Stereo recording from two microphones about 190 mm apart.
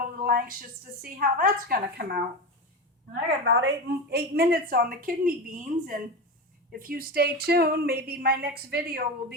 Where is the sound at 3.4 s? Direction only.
65° right (ahead or behind).